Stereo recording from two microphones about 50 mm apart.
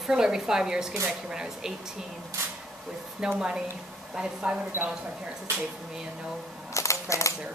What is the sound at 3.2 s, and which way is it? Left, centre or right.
Speech, centre.